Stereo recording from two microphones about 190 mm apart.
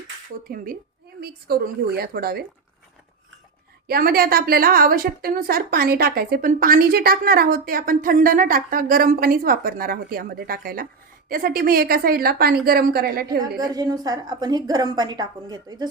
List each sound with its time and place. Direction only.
0.4 s a woman's voice: 50° right (ahead or behind)
3.8 s a woman's voice: 50° right (ahead or behind)
13.6 s a woman's voice: 20° right (ahead or behind)